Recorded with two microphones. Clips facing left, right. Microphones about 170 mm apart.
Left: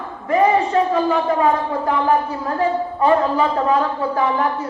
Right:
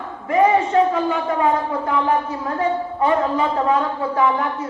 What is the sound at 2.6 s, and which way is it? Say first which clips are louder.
A woman's voice: left 2 dB; 35° left (ahead or behind).